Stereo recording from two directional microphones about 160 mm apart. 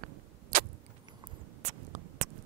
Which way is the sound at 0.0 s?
60° right (ahead or behind).